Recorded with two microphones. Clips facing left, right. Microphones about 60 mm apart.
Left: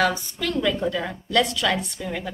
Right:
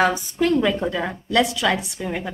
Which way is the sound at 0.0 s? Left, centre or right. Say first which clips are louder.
Right 4 dB; centre.